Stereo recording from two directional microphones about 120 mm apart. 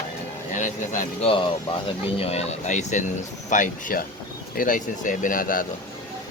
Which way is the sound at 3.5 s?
90° left.